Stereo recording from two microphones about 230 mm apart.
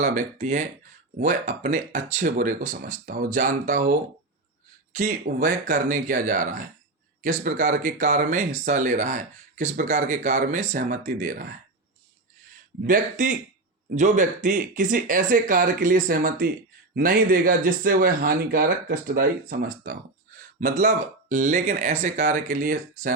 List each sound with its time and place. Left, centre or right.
0.0 s speech: right
12.8 s speech: right